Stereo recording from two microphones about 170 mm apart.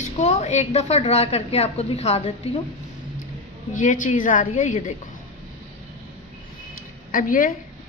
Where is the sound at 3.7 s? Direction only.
50° left (ahead or behind).